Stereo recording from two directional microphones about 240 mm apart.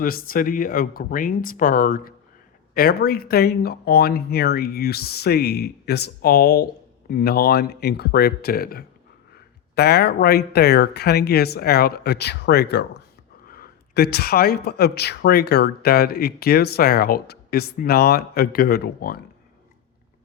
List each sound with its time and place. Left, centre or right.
0.0 s speech: left